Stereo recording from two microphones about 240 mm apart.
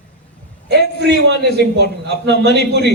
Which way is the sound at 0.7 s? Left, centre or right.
Right.